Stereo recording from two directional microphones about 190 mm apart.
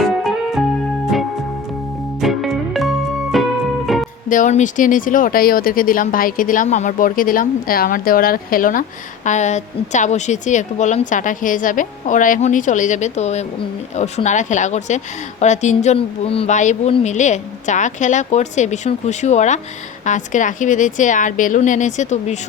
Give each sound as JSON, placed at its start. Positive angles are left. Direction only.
{"t": 0.0, "sound": "music", "side_deg": 0}
{"t": 2.2, "sound": "music", "side_deg": 0}
{"t": 4.3, "sound": "a woman's voice", "side_deg": 40}